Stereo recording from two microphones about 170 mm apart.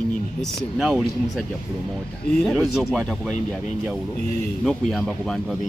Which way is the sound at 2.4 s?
Centre (ahead or behind).